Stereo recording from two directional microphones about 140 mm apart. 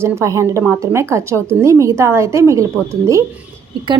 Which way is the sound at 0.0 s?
20° right (ahead or behind).